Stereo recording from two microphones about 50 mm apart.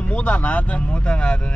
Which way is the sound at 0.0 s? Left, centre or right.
Left.